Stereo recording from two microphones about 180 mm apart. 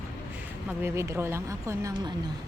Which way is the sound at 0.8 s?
15° right (ahead or behind).